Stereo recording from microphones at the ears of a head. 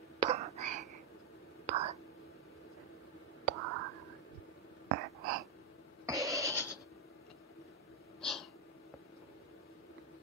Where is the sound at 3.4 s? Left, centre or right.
Right.